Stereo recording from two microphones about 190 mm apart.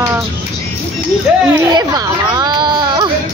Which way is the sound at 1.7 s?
20° right (ahead or behind).